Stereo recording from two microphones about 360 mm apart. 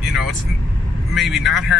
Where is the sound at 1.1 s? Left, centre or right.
Centre.